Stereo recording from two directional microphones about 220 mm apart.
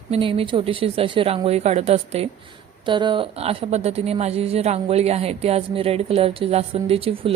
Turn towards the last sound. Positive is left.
turn(degrees=-25)  # may be behind; listen again after turning